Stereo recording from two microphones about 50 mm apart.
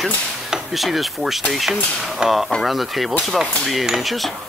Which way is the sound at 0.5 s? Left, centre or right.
Centre.